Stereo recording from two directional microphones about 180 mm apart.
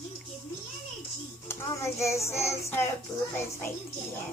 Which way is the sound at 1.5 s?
15° left (ahead or behind).